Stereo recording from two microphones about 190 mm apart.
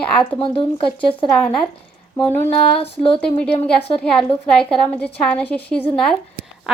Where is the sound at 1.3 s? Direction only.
5° left (ahead or behind).